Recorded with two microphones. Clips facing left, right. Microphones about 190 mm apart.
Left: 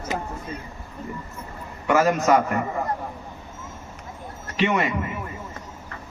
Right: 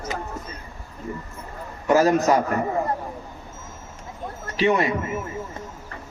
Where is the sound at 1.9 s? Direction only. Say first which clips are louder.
Right 2 dB; 35° right (ahead or behind).